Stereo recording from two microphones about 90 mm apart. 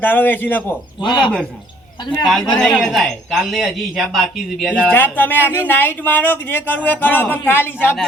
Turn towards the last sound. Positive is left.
turn(degrees=20)  # may be behind; listen again after turning